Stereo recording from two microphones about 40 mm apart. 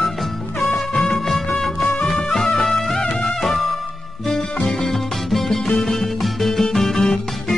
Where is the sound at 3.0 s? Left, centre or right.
Left.